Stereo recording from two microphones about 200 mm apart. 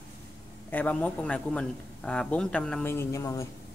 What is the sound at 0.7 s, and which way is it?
A man's voice, 10° left (ahead or behind).